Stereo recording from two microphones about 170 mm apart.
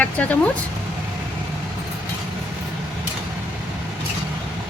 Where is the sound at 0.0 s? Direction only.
10° left (ahead or behind).